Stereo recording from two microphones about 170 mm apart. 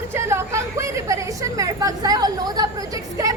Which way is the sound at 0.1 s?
15° right (ahead or behind).